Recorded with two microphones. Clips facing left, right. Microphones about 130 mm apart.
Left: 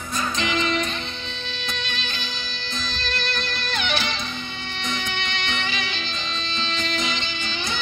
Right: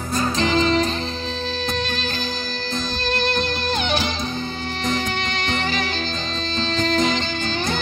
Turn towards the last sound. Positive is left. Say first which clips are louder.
# right 6 dB
turn(degrees=-45)  # may be behind; listen again after turning